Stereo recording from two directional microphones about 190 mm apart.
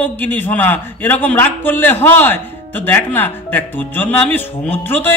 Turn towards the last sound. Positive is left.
turn(degrees=10)  # may be behind; listen again after turning